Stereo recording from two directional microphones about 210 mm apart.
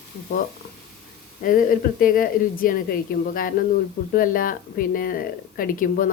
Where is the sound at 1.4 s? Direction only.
40° left (ahead or behind).